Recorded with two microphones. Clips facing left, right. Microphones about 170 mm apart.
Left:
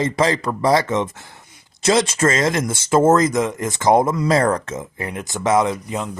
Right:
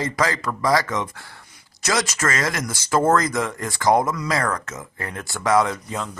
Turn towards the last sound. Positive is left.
turn(degrees=20)  # may be behind; listen again after turning